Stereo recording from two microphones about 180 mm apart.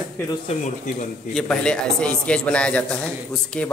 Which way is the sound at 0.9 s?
45° left (ahead or behind).